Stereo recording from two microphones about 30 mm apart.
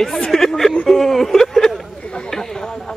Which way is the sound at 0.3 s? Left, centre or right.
Centre.